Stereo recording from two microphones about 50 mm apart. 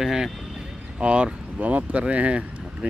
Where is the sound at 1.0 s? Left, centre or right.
Right.